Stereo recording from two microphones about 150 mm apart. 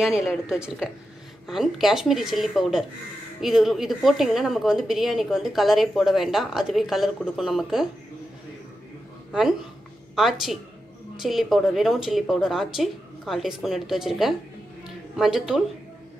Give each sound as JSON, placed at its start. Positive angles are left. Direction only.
{"t": 0.0, "sound": "a woman's voice", "side_deg": -5}
{"t": 9.3, "sound": "a woman's voice", "side_deg": 0}